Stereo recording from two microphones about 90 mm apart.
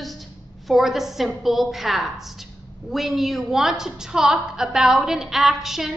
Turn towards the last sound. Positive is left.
turn(degrees=-5)  # may be behind; listen again after turning